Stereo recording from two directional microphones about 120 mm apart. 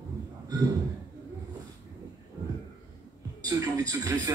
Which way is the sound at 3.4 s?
30° right (ahead or behind).